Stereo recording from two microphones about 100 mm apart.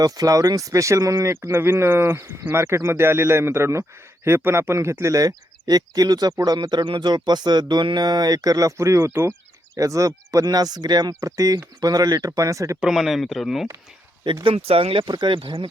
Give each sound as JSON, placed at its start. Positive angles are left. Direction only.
{"t": 0.0, "sound": "speech", "side_deg": -35}
{"t": 12.8, "sound": "speech", "side_deg": 0}
{"t": 14.4, "sound": "speech", "side_deg": -80}
{"t": 15.0, "sound": "speech", "side_deg": -50}